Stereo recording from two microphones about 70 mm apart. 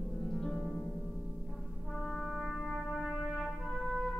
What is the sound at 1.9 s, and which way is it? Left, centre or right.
Brass instrument, centre.